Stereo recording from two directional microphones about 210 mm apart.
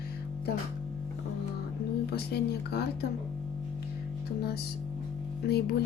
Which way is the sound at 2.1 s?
50° left (ahead or behind).